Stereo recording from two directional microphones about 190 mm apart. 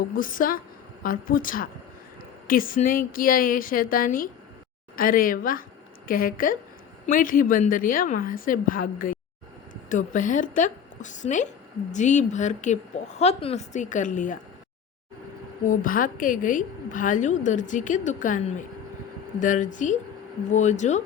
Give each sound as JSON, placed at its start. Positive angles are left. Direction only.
{"t": 0.2, "sound": "a woman's voice", "side_deg": 45}
{"t": 15.6, "sound": "a woman's voice", "side_deg": 45}